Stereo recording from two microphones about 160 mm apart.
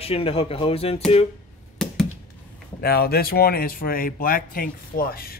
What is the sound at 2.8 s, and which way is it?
Speech, 75° left (ahead or behind).